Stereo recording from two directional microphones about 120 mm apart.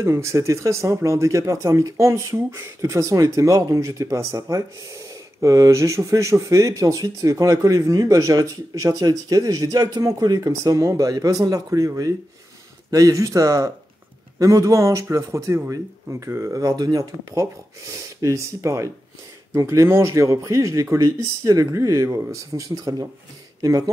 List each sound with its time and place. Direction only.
0.0 s speech: 25° right (ahead or behind)